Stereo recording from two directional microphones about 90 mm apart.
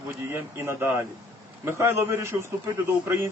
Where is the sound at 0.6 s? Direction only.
25° right (ahead or behind).